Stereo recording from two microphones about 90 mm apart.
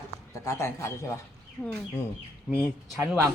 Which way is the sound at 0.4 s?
35° left (ahead or behind).